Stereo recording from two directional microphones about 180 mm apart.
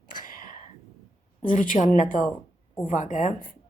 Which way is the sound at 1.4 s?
45° left (ahead or behind).